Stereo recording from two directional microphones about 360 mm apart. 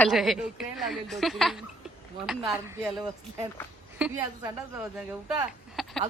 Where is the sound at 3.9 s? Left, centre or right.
Centre.